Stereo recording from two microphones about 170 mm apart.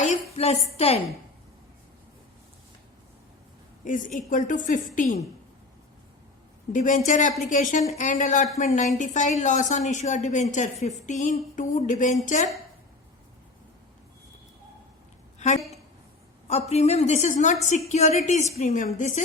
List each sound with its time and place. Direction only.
0.0 s a woman's voice: 40° left (ahead or behind)
3.8 s a woman's voice: 50° left (ahead or behind)
6.7 s a woman's voice: 50° left (ahead or behind)
15.4 s a woman's voice: 45° left (ahead or behind)